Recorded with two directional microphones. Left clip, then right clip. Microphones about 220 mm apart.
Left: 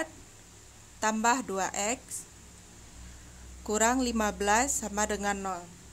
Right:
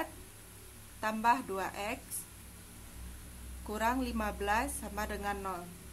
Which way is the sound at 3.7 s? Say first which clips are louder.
Left 6 dB; 35° left (ahead or behind).